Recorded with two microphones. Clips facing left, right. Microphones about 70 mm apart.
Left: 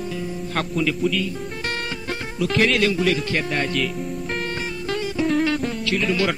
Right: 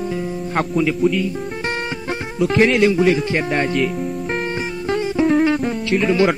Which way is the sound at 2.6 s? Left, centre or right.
Right.